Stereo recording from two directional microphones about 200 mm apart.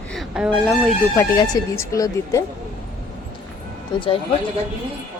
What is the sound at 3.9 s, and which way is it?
Speech, 25° left (ahead or behind).